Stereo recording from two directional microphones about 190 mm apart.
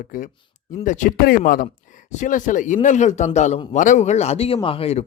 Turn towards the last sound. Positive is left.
turn(degrees=30)  # may be behind; listen again after turning